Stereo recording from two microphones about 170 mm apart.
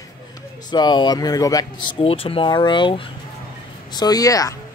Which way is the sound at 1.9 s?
35° left (ahead or behind).